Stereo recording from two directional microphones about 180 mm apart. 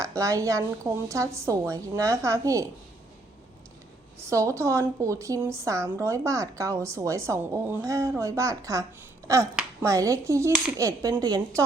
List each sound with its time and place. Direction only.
0.2 s speech: 20° right (ahead or behind)
4.2 s a woman's voice: 15° right (ahead or behind)